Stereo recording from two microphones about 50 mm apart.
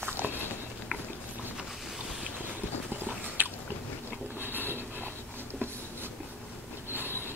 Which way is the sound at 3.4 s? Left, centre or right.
Right.